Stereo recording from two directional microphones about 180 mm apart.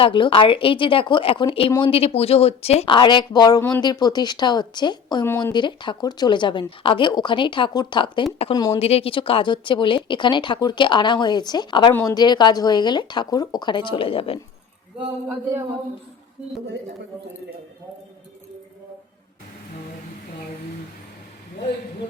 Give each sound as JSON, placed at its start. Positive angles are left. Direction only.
{"t": 0.0, "sound": "speech", "side_deg": 30}